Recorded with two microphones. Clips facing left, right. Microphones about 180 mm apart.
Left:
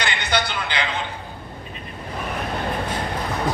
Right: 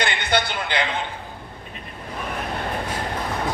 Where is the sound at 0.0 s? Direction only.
55° right (ahead or behind).